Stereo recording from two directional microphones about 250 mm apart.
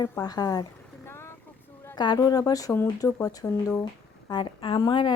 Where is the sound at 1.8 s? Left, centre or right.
Centre.